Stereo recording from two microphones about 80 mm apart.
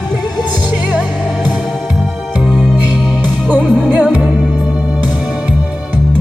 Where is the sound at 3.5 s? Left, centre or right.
Right.